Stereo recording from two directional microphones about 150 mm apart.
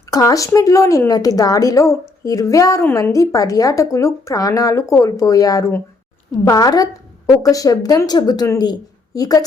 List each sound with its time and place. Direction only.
0.1 s speech: 20° left (ahead or behind)